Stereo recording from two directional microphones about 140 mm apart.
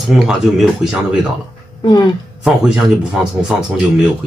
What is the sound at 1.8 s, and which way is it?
Speech, 30° left (ahead or behind).